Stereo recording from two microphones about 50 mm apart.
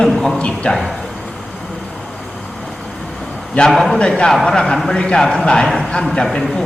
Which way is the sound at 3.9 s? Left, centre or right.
Centre.